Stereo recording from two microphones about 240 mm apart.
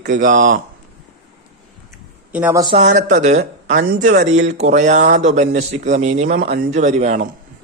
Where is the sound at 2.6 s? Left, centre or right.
Right.